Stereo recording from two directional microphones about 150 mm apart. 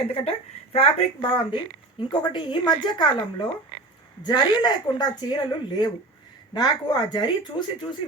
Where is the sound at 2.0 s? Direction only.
30° left (ahead or behind).